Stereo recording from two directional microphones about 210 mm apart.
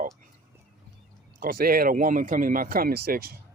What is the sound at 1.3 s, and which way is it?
Speech, 45° right (ahead or behind).